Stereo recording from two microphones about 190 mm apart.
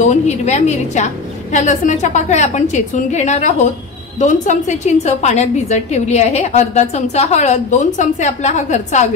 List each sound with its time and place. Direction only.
0.0 s a woman's voice: 35° left (ahead or behind)